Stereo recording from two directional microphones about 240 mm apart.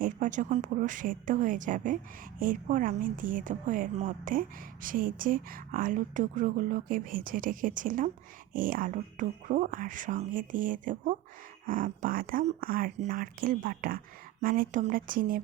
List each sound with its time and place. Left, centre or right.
0.0 s a woman's voice: right